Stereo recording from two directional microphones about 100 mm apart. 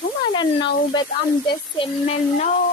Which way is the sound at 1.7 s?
70° left (ahead or behind).